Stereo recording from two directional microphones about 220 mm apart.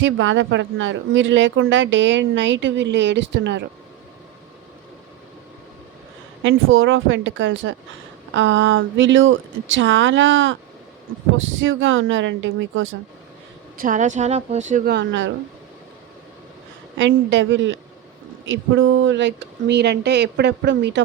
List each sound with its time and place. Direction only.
0.0 s speech: 55° right (ahead or behind)
6.4 s speech: 60° right (ahead or behind)
13.7 s a woman's voice: 35° right (ahead or behind)
14.8 s speech: 55° right (ahead or behind)
17.0 s speech: 55° right (ahead or behind)